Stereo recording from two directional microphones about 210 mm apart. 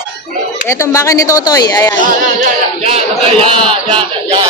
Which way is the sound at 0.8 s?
15° left (ahead or behind).